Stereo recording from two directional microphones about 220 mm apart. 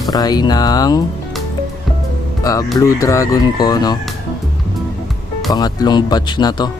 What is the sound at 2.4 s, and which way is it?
Speech, 15° left (ahead or behind).